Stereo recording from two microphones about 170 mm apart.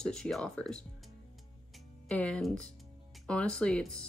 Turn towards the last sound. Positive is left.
turn(degrees=5)  # may be behind; listen again after turning